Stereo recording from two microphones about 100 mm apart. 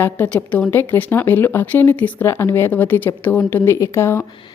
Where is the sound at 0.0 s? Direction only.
20° left (ahead or behind).